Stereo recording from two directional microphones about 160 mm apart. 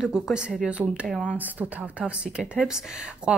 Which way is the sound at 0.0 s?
5° right (ahead or behind).